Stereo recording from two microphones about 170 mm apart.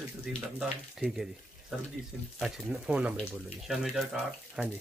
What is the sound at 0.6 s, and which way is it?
Speech, 5° right (ahead or behind).